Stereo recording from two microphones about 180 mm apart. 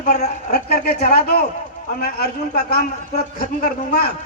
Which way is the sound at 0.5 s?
60° left (ahead or behind).